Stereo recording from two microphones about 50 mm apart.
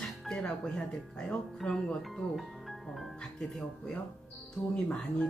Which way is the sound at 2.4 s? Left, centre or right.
Centre.